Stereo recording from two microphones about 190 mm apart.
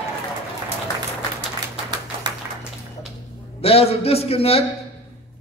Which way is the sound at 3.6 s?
30° left (ahead or behind).